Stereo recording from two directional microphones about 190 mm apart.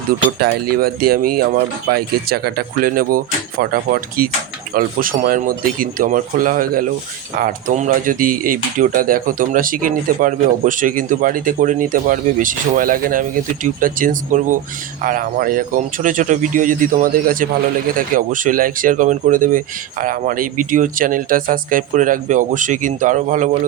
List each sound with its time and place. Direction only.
0.3 s speech: 55° right (ahead or behind)